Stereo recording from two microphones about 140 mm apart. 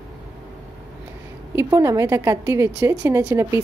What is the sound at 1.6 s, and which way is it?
A woman's voice, 20° right (ahead or behind).